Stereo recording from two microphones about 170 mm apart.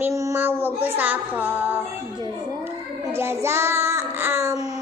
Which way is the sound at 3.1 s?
15° right (ahead or behind).